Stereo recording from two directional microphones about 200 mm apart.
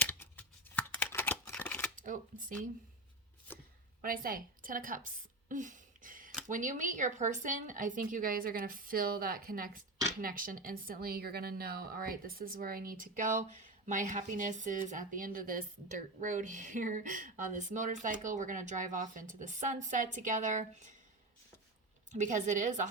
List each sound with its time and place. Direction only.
0.0 s scissors: 10° left (ahead or behind)
4.0 s a woman's voice: 45° right (ahead or behind)
22.1 s speech: 40° right (ahead or behind)